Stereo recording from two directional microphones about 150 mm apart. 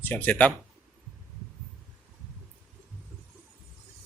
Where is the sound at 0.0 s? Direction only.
10° left (ahead or behind).